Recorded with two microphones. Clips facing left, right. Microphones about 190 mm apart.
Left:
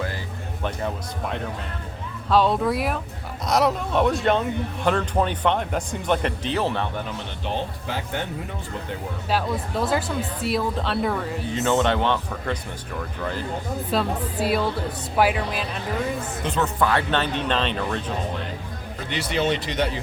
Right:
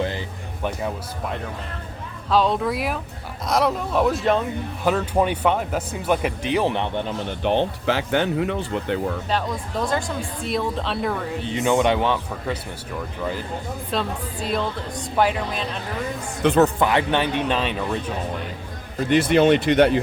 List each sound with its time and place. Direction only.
2.3 s a woman's voice: centre (ahead or behind); by 7.0 s 15° right (ahead or behind)
7.4 s speech: 70° right (ahead or behind)
9.8 s a woman's voice: 5° left (ahead or behind)
11.4 s speech: 15° right (ahead or behind)
13.9 s a woman's voice: 5° left (ahead or behind)
16.4 s speech: 70° right (ahead or behind)
16.8 s speech: 15° right (ahead or behind)
19.0 s speech: 50° right (ahead or behind)